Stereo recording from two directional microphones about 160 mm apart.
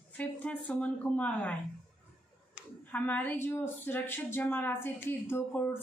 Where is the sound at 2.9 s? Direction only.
10° left (ahead or behind).